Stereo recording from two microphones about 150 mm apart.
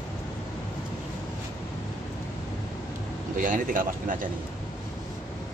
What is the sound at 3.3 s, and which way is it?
Speech, 60° right (ahead or behind).